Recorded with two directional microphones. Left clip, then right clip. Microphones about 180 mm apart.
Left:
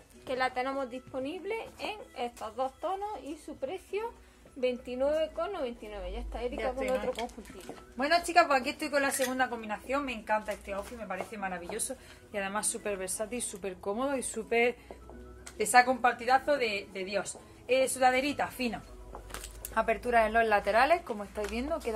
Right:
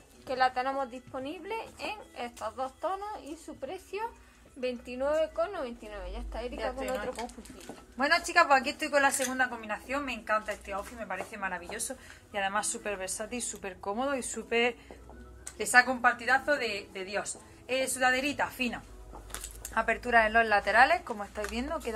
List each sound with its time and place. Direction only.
0.3 s a woman's voice: 30° left (ahead or behind); by 21.9 s 50° left (ahead or behind)